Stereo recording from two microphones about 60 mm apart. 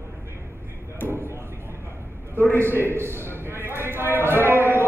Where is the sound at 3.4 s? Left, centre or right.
Right.